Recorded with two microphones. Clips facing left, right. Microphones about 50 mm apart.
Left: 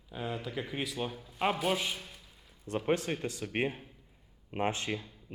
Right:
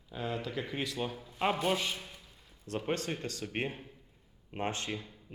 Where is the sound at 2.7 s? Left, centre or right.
Centre.